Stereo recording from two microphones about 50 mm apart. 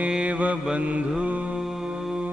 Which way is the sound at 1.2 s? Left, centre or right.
Right.